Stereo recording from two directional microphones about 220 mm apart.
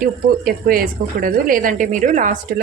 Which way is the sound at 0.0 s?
40° right (ahead or behind).